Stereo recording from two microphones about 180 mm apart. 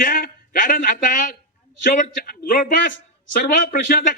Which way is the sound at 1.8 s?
50° left (ahead or behind).